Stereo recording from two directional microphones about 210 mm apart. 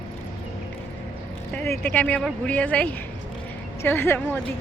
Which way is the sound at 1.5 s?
10° left (ahead or behind).